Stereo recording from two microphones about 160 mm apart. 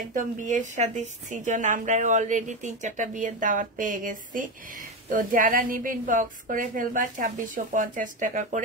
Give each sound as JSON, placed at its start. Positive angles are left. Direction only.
{"t": 0.1, "sound": "a woman's voice", "side_deg": -55}